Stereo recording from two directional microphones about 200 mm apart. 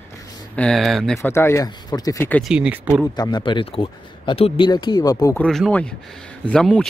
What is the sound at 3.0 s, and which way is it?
Speech, 20° left (ahead or behind).